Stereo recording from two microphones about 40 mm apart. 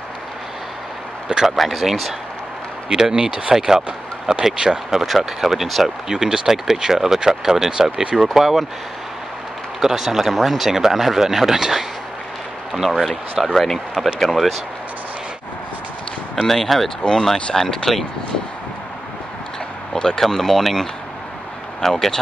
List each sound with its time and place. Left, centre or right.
1.6 s speech: centre
2.9 s speech: centre
6.0 s speech: centre
7.7 s speech: centre
8.2 s speech: centre
9.8 s speech: centre
16.4 s speech: centre
19.9 s a sound: left
20.2 s speech: centre